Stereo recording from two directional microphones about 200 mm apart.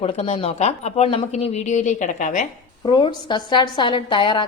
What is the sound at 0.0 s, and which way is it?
Speech, 30° left (ahead or behind).